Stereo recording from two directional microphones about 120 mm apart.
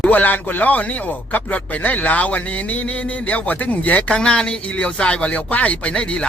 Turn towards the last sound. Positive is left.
turn(degrees=10)  # may be behind; listen again after turning